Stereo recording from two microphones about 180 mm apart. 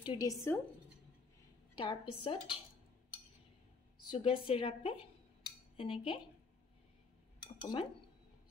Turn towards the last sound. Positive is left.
turn(degrees=25)  # may be behind; listen again after turning